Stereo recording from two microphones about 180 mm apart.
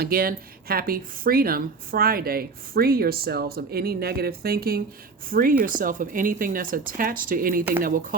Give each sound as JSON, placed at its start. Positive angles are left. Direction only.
{"t": 0.0, "sound": "speech", "side_deg": -55}